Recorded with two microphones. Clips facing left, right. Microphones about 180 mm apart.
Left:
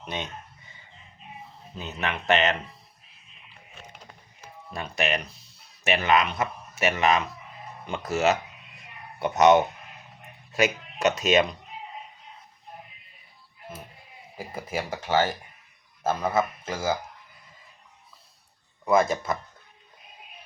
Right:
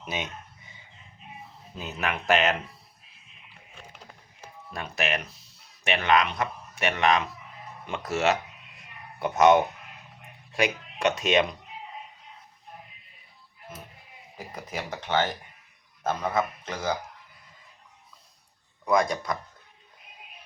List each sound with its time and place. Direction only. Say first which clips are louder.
0.0 s speech: even; 5° right (ahead or behind)
1.7 s a man's voice: even; 5° right (ahead or behind)
4.7 s a man's voice: left 2 dB; centre (ahead or behind)
14.3 s speech: left 4 dB; 10° left (ahead or behind)
18.9 s a man's voice: left 2 dB; 5° left (ahead or behind)